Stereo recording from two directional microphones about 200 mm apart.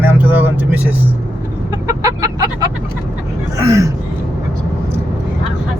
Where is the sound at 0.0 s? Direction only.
10° right (ahead or behind).